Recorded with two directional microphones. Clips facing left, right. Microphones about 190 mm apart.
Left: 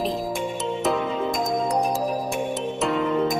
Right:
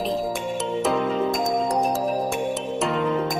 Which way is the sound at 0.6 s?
Centre (ahead or behind).